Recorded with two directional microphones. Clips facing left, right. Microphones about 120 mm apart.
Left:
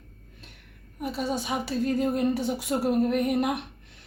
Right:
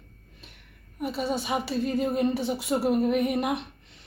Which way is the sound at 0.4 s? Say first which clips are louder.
Even; centre (ahead or behind).